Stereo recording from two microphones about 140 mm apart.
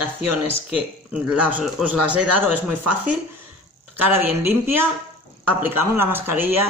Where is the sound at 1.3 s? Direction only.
10° right (ahead or behind).